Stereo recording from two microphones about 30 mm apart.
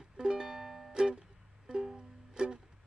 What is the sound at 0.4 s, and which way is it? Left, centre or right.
Music, centre.